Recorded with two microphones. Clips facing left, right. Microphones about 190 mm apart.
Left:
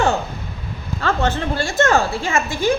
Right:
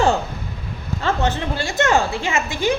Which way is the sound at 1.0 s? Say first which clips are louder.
Left 1 dB; 20° right (ahead or behind).